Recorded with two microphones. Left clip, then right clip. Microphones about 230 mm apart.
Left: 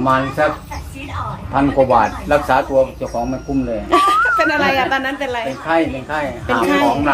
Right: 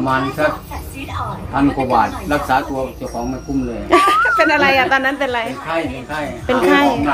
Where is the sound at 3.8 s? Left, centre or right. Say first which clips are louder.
Right 1 dB; centre.